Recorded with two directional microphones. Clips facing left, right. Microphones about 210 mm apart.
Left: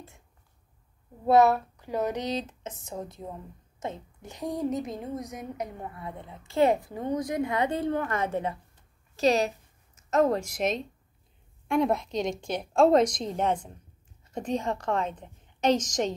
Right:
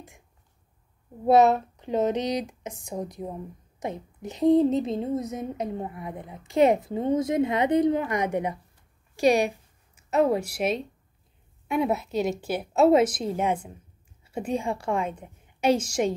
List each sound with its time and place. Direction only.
1.2 s a woman's voice: 20° right (ahead or behind)